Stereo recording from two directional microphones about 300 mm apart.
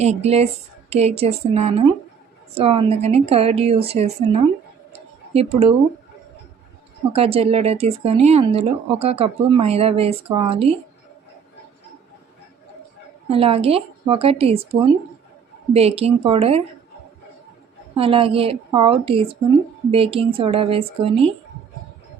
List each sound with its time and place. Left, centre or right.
0.0 s speech: right
4.9 s a sound: right
7.1 s speech: centre
13.2 s speech: centre
17.9 s a woman's voice: centre